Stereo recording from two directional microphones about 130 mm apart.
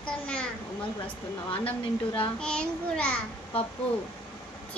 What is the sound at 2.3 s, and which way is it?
Speech, 5° left (ahead or behind).